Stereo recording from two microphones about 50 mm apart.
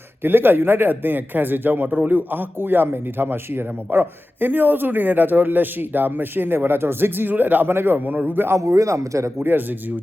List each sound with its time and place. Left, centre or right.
0.2 s a man's voice: right
7.7 s speech: right
7.9 s a man's voice: right
8.5 s a man's voice: right
9.4 s speech: right